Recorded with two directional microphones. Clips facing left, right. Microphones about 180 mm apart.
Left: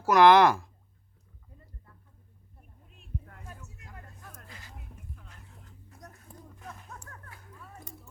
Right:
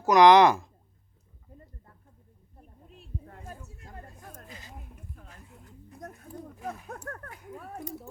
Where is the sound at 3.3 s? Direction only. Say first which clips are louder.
Right 4 dB; 30° right (ahead or behind).